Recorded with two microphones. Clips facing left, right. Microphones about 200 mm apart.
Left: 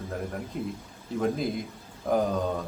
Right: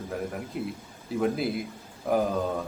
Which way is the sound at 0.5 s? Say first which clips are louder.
Even; 5° right (ahead or behind).